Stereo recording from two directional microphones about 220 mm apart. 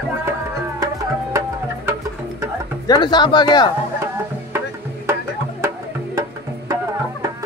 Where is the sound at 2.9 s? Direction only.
20° left (ahead or behind).